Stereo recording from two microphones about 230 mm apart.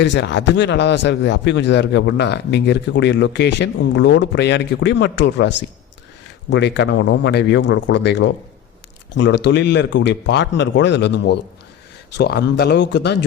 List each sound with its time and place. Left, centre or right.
0.0 s a man's voice: left